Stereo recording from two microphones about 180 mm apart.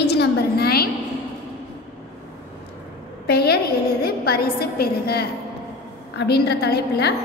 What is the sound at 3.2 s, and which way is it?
A woman's voice, 65° left (ahead or behind).